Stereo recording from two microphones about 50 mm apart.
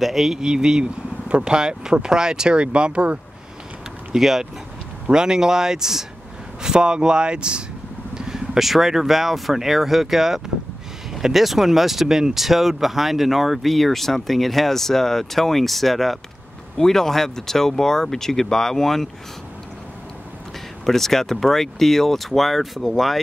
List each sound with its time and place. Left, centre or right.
0.0 s speech: centre; by 3.2 s right
4.1 s speech: centre
20.8 s speech: centre